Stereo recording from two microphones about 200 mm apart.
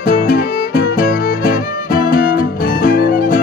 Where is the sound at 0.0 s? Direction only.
45° left (ahead or behind).